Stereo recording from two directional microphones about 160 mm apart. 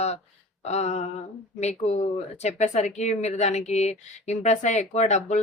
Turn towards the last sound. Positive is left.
turn(degrees=45)  # may be behind; listen again after turning